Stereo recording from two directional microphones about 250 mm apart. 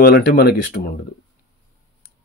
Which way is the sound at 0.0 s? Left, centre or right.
Left.